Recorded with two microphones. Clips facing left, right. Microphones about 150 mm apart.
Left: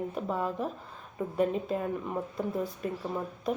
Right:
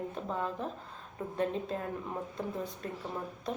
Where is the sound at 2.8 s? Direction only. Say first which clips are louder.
Left 6 dB; 10° left (ahead or behind).